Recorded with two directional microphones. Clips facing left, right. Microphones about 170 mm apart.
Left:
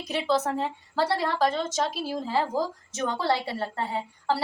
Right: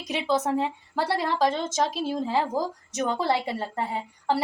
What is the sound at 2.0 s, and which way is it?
A woman's voice, 20° right (ahead or behind).